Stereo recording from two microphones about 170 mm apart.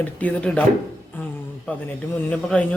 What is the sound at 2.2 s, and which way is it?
Speech, 5° left (ahead or behind).